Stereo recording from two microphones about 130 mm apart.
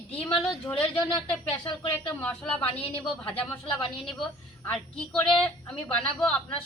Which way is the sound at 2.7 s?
45° left (ahead or behind).